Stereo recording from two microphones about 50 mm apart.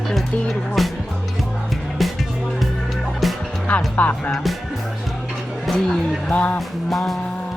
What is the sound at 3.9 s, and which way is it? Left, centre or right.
Music, left.